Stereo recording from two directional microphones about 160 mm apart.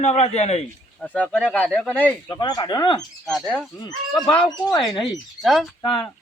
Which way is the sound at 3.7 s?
25° left (ahead or behind).